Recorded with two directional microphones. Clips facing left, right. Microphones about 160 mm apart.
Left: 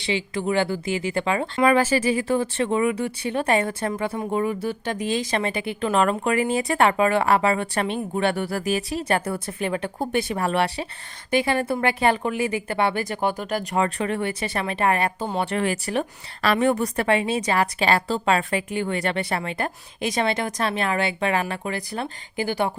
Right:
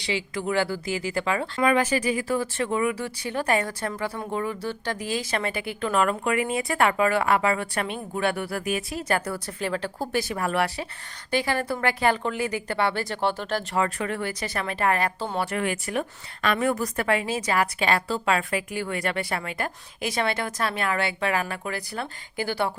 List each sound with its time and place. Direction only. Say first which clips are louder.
0.0 s speech: left 3 dB; 25° left (ahead or behind)
1.6 s speech: left 3 dB; 35° left (ahead or behind); by 13.7 s 15° left (ahead or behind)
13.7 s speech: left 4 dB; 25° left (ahead or behind)